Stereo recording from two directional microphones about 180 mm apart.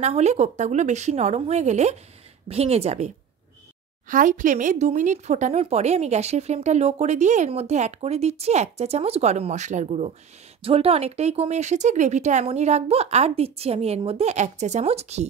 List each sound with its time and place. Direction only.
0.0 s speech: 40° right (ahead or behind)
4.1 s speech: 45° right (ahead or behind)